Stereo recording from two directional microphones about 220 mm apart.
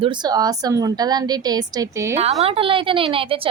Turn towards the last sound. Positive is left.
turn(degrees=-25)  # may be behind; listen again after turning